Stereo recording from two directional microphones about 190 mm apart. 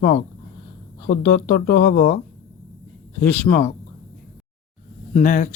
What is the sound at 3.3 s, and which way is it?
Speech, 10° left (ahead or behind).